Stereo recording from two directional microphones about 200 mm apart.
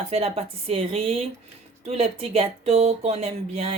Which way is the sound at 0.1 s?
30° right (ahead or behind).